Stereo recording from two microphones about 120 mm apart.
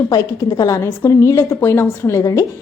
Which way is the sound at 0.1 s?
30° left (ahead or behind).